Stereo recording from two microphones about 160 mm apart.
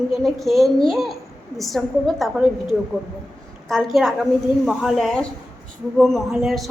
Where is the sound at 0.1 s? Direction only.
Centre (ahead or behind).